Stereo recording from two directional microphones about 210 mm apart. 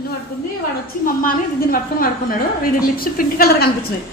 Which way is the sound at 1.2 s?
40° left (ahead or behind).